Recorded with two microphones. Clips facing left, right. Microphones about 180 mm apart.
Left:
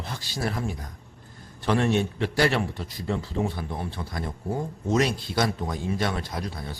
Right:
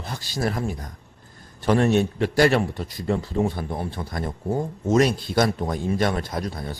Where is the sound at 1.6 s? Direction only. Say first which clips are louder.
Right 4 dB; 45° right (ahead or behind).